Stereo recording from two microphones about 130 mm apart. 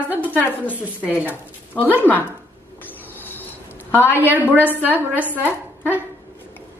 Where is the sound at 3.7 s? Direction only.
15° left (ahead or behind).